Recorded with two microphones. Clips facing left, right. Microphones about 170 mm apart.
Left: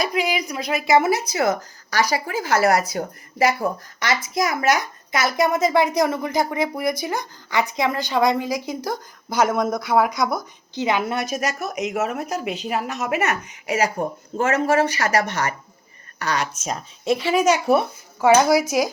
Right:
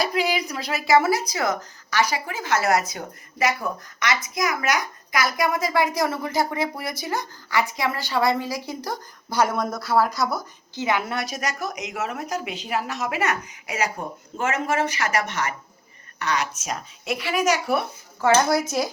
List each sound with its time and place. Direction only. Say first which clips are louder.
0.0 s speech: left 1 dB; 35° right (ahead or behind)
0.3 s a sound: left 1 dB; 10° left (ahead or behind)
0.7 s speech: left 1 dB; 20° left (ahead or behind)
18.2 s speech: left 4 dB; 10° left (ahead or behind)